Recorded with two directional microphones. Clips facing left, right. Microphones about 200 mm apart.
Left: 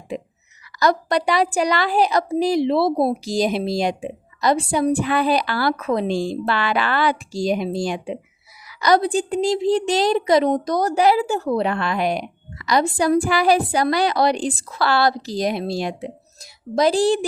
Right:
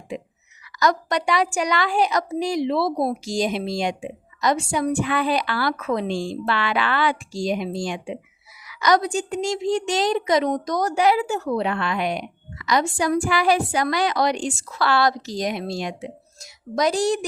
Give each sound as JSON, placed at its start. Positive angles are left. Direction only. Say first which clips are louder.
{"t": 0.8, "sound": "a woman's voice", "louder": "left 3 dB", "side_deg": 35}